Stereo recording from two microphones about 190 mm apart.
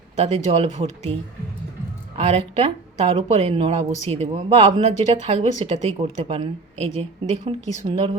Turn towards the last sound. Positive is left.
turn(degrees=-30)  # may be behind; listen again after turning